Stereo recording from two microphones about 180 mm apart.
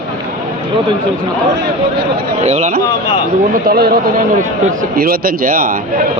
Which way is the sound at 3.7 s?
60° right (ahead or behind).